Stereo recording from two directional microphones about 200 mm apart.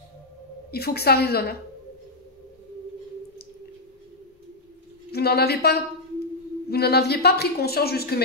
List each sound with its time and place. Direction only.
0.7 s a woman's voice: 50° left (ahead or behind)
5.1 s a woman's voice: 50° left (ahead or behind)